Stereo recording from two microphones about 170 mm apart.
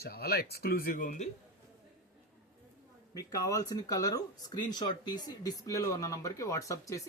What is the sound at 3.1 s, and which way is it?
Speech, 20° left (ahead or behind).